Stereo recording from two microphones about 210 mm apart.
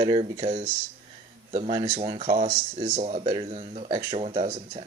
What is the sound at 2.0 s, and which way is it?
Speech, 25° right (ahead or behind).